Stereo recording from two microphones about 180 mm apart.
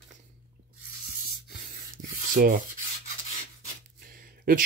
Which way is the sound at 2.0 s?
50° right (ahead or behind).